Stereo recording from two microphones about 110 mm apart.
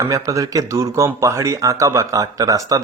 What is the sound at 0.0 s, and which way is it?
Speech, 30° right (ahead or behind).